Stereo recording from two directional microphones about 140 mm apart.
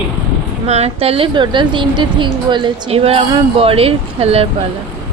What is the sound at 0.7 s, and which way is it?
Speech, 50° right (ahead or behind).